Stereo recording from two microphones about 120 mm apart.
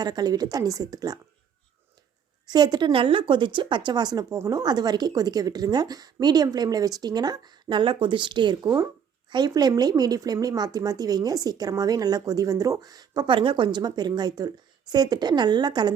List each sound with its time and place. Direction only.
0.0 s speech: 35° right (ahead or behind)
2.5 s speech: 35° right (ahead or behind)